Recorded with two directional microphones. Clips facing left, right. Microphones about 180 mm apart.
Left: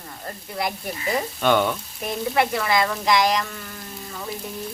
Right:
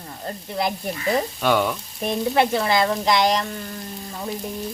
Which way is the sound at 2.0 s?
25° right (ahead or behind).